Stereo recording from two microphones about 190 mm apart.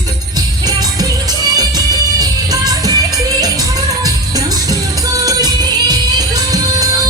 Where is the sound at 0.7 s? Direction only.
20° right (ahead or behind).